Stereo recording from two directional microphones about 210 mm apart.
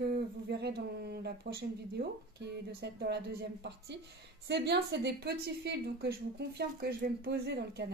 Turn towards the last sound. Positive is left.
turn(degrees=-50)  # may be behind; listen again after turning